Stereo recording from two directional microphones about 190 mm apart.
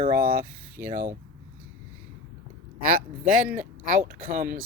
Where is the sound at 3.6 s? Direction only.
40° right (ahead or behind).